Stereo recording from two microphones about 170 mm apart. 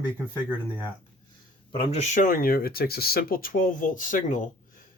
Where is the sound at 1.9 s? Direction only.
45° left (ahead or behind).